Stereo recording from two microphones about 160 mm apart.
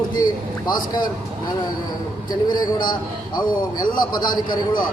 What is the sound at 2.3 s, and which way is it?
A man's voice, 25° left (ahead or behind).